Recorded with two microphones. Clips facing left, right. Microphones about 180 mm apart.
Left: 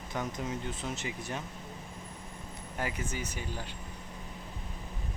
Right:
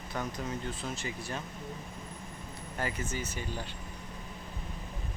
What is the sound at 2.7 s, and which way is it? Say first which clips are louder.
Speech: right 1 dB; 15° left (ahead or behind).